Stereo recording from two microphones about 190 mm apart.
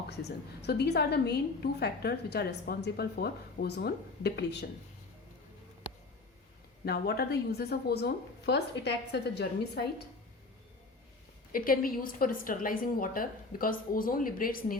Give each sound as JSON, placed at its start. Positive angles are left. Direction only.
{"t": 0.2, "sound": "a woman's voice", "side_deg": 60}
{"t": 6.8, "sound": "a woman's voice", "side_deg": 55}
{"t": 11.5, "sound": "a woman's voice", "side_deg": 50}